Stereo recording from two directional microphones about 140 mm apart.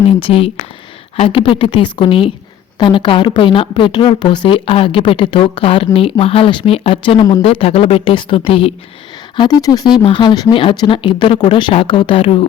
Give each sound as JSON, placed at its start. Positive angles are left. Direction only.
{"t": 0.2, "sound": "speech", "side_deg": 40}
{"t": 9.3, "sound": "speech", "side_deg": 30}